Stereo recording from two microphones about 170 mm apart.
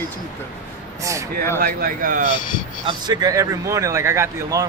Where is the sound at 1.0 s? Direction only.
20° right (ahead or behind).